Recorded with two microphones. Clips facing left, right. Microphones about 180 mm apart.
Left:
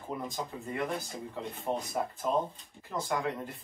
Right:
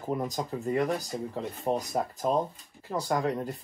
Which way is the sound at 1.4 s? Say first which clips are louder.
Right 4 dB; 40° right (ahead or behind).